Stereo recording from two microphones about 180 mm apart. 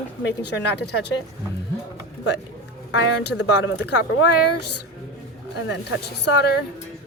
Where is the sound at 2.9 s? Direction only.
85° left.